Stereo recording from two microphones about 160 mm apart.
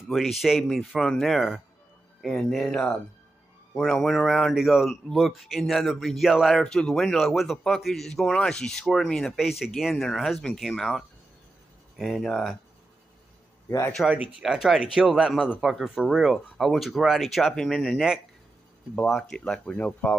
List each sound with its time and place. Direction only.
0.1 s speech: centre (ahead or behind)
13.7 s a man's voice: 20° left (ahead or behind)
13.9 s speech: 5° right (ahead or behind)